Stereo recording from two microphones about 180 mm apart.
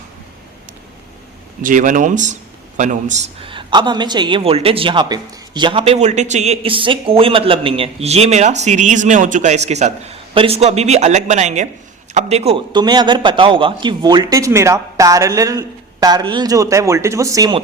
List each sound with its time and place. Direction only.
1.6 s a man's voice: 45° right (ahead or behind); by 17.6 s 20° right (ahead or behind)